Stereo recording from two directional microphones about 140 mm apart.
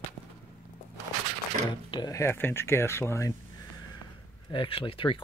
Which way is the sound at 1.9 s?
30° left (ahead or behind).